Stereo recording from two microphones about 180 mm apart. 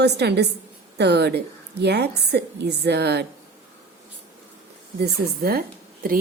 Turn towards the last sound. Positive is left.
turn(degrees=-55)  # may be behind; listen again after turning